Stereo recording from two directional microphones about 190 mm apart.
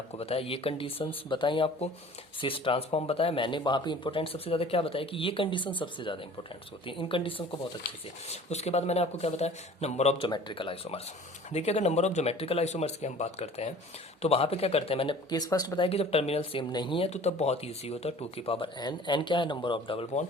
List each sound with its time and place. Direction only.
0.2 s speech: 30° left (ahead or behind)